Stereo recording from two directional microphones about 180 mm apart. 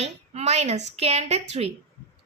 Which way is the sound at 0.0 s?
35° right (ahead or behind).